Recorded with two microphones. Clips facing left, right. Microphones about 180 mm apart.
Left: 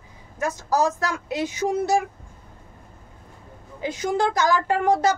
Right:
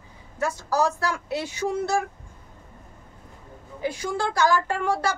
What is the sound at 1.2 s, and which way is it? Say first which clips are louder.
Speech: left 3 dB; 15° left (ahead or behind).